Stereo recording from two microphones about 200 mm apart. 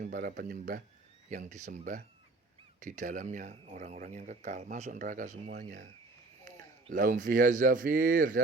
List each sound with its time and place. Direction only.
0.0 s speech: 40° right (ahead or behind)